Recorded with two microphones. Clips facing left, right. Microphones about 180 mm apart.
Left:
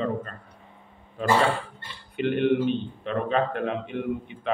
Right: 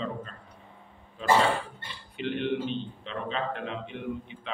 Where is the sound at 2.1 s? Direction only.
55° left (ahead or behind).